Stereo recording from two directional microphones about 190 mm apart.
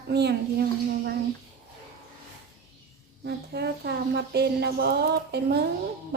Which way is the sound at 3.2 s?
60° right (ahead or behind).